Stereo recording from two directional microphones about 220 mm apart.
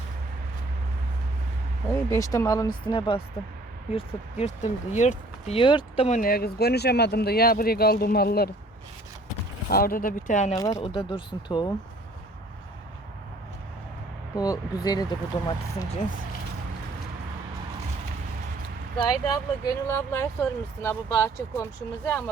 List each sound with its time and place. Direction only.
1.9 s speech: 15° left (ahead or behind); by 8.4 s 45° left (ahead or behind)
9.6 s speech: 40° left (ahead or behind)
10.5 s speech: 15° left (ahead or behind)
14.3 s speech: 15° left (ahead or behind)
18.9 s speech: 15° left (ahead or behind)